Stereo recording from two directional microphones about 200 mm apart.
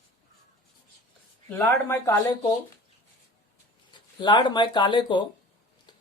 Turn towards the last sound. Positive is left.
turn(degrees=20)  # may be behind; listen again after turning